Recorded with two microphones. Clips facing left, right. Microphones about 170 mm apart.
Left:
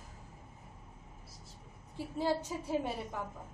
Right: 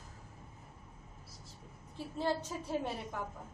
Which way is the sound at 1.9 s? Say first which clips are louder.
Left 2 dB; 10° left (ahead or behind).